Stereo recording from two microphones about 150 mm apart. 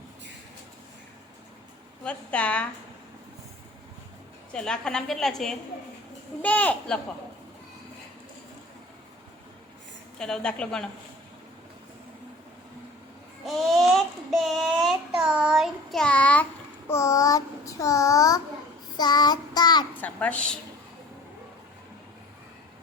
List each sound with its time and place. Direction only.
2.0 s a woman's voice: 10° left (ahead or behind)
4.5 s child singing: 5° left (ahead or behind)
6.4 s a woman's voice: 10° left (ahead or behind)
10.2 s child singing: 5° left (ahead or behind)
13.4 s child singing: centre (ahead or behind); by 19.9 s 30° left (ahead or behind)
20.0 s a woman's voice: 10° left (ahead or behind)